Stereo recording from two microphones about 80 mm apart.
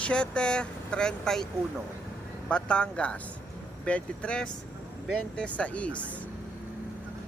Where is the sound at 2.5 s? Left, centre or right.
Centre.